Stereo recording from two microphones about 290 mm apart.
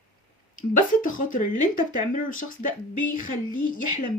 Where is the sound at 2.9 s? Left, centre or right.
Left.